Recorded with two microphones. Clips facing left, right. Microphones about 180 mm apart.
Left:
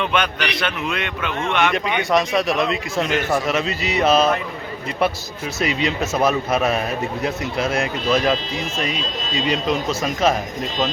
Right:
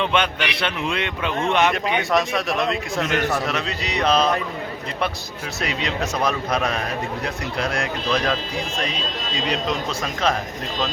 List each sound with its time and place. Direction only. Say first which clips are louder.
0.0 s a man's voice: even; 25° right (ahead or behind)
2.0 s a man's voice: left 6 dB; centre (ahead or behind)
5.5 s a man's voice: left 4 dB; centre (ahead or behind)
9.5 s a man's voice: left 4 dB; 5° left (ahead or behind)